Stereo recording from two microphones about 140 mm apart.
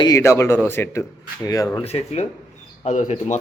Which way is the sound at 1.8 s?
45° left (ahead or behind).